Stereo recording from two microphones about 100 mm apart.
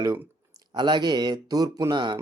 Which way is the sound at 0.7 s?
50° right (ahead or behind).